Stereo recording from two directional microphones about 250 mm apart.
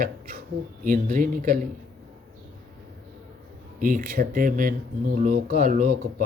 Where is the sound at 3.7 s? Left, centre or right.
Right.